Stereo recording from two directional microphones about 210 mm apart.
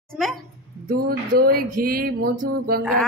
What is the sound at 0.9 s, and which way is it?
Speech, 45° right (ahead or behind).